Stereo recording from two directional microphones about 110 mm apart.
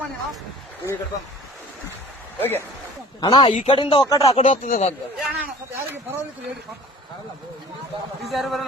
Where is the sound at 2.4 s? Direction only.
20° left (ahead or behind).